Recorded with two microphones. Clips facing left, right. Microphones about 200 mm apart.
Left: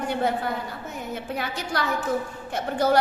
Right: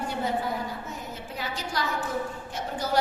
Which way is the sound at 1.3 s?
60° left (ahead or behind).